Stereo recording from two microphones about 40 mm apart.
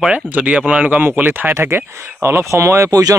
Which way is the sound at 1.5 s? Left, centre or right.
Right.